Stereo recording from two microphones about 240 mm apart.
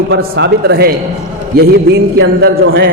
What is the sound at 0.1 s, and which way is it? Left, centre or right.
A man's voice, right.